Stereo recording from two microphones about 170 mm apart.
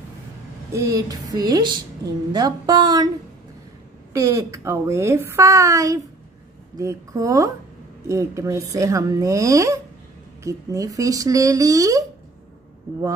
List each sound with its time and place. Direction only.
0.7 s speech: 20° right (ahead or behind)
4.1 s a woman's voice: 20° right (ahead or behind)